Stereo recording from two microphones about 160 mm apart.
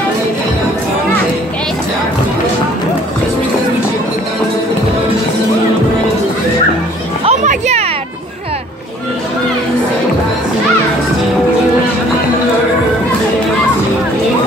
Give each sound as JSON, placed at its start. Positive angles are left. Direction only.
{"t": 7.2, "sound": "music", "side_deg": -45}